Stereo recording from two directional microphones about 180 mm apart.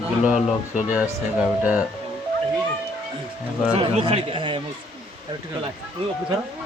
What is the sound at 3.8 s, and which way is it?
Speech, 30° right (ahead or behind).